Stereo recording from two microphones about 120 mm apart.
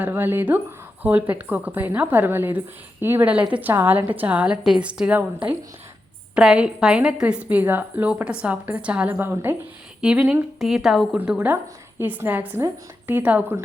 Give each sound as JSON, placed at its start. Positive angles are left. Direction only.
{"t": 0.0, "sound": "a woman's voice", "side_deg": -15}
{"t": 11.2, "sound": "a woman's voice", "side_deg": -15}